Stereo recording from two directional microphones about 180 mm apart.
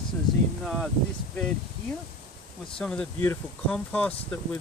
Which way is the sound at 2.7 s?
5° left (ahead or behind).